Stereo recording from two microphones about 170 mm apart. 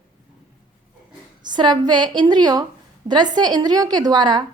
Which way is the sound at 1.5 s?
25° right (ahead or behind).